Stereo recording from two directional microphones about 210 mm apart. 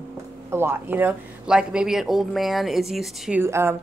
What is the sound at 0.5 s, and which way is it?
Speech, 10° right (ahead or behind).